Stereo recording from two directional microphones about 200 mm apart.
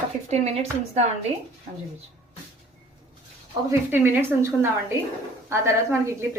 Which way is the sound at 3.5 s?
15° right (ahead or behind).